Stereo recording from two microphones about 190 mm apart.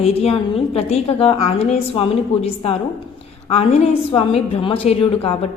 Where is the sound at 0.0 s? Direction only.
30° left (ahead or behind).